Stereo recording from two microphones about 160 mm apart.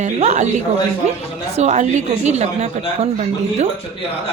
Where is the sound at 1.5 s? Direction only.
45° right (ahead or behind).